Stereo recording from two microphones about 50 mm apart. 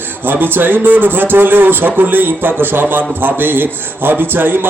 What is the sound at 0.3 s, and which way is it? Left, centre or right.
A man's voice, right.